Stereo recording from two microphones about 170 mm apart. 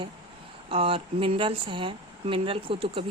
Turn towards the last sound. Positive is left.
turn(degrees=-30)  # may be behind; listen again after turning